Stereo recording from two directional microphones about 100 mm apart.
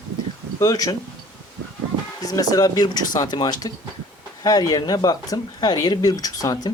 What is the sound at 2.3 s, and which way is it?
Speech, 40° left (ahead or behind).